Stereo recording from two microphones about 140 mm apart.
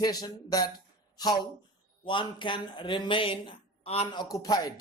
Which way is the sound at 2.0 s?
35° left (ahead or behind).